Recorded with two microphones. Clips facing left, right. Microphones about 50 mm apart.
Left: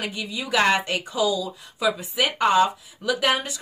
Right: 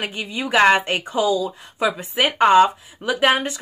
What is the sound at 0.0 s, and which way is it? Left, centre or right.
Speech, right.